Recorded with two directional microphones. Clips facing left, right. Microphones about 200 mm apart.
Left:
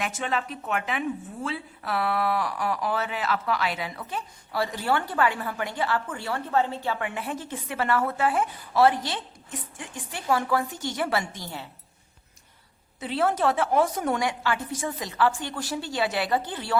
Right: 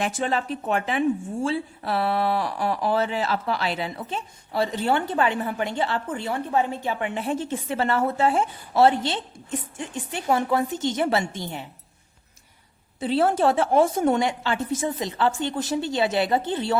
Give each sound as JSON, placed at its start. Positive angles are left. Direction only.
{"t": 0.0, "sound": "a woman's voice", "side_deg": -35}
{"t": 13.0, "sound": "a woman's voice", "side_deg": -30}